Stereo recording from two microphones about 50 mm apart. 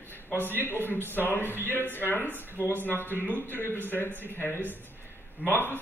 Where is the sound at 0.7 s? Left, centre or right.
Left.